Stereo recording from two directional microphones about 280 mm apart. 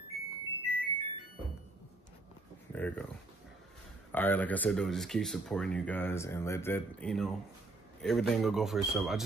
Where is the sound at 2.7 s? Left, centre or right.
Centre.